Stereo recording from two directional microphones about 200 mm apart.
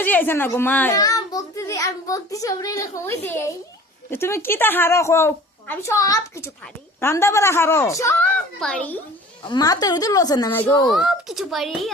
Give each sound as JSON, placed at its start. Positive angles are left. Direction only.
{"t": 0.0, "sound": "a child's voice", "side_deg": 10}
{"t": 9.5, "sound": "a woman's voice", "side_deg": 20}
{"t": 10.8, "sound": "speech", "side_deg": 0}